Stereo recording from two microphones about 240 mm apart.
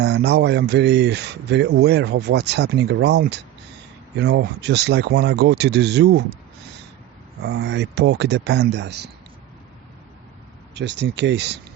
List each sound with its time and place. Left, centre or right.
0.0 s speech: right
7.4 s speech: right
10.8 s speech: right